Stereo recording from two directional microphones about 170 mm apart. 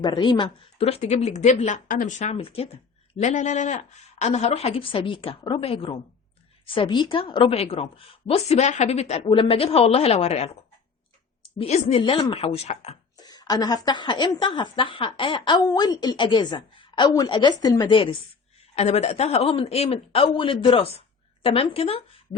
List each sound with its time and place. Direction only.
0.0 s a woman's voice: 25° left (ahead or behind); by 13.0 s 40° left (ahead or behind)
13.1 s a woman's voice: 25° left (ahead or behind)